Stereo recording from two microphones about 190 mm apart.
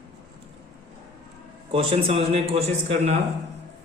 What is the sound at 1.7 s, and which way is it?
A man's voice, 30° right (ahead or behind).